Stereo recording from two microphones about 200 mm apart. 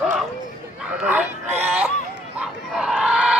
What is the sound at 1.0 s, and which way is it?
Music, 10° right (ahead or behind).